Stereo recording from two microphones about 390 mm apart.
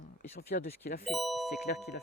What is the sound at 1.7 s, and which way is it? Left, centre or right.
Speech, left.